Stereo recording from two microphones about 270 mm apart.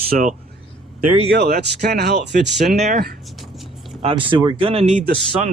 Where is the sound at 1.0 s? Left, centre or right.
Right.